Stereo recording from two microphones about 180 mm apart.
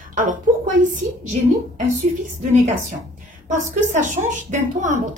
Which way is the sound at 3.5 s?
45° right (ahead or behind).